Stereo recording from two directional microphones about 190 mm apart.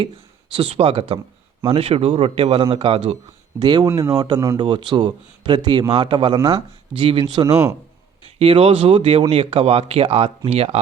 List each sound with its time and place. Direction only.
0.5 s speech: 30° right (ahead or behind)